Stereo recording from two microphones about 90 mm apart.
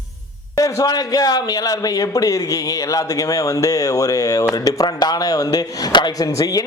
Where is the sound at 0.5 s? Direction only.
40° left (ahead or behind).